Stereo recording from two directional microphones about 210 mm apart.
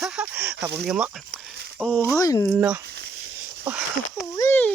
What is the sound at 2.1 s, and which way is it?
Speech, 15° left (ahead or behind).